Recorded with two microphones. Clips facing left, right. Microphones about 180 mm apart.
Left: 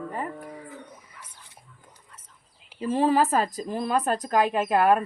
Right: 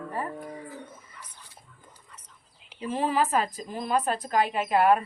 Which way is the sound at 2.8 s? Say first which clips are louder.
Left 5 dB; 40° left (ahead or behind).